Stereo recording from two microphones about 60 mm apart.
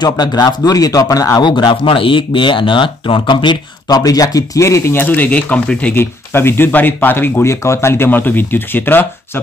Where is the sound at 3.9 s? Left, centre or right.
Left.